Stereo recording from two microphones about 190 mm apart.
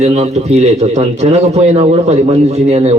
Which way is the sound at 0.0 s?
35° right (ahead or behind).